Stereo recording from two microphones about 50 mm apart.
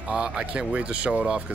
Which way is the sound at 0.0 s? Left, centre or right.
Right.